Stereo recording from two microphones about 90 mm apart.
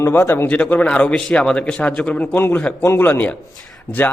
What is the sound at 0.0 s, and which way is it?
Speech, 25° left (ahead or behind).